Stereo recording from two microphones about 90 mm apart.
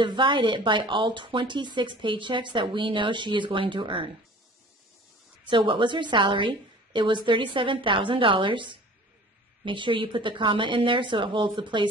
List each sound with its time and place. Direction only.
0.0 s speech: 60° right (ahead or behind)
5.4 s speech: 65° right (ahead or behind)